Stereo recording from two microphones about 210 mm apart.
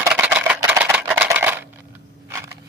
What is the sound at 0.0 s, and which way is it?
Music, 5° right (ahead or behind).